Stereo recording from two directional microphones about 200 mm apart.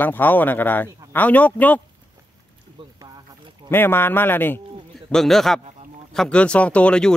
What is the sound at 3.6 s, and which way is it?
A man's voice, 10° left (ahead or behind).